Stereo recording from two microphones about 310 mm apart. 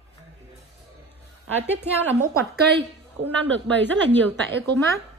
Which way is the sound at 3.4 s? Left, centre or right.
Centre.